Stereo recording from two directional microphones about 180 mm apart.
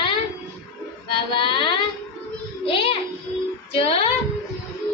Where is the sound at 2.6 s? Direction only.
30° left (ahead or behind).